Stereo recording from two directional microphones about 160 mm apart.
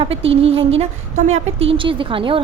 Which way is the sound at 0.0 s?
35° right (ahead or behind).